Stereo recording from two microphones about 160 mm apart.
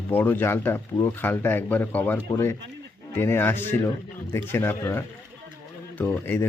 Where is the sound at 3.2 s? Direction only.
15° left (ahead or behind).